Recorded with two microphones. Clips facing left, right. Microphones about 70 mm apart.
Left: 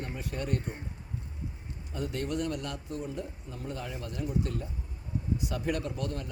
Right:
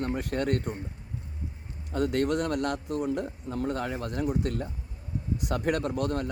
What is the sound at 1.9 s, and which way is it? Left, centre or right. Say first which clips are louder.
A man's voice: right 8 dB; right.